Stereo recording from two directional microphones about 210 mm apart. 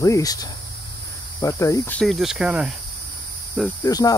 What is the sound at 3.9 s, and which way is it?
Speech, 15° left (ahead or behind).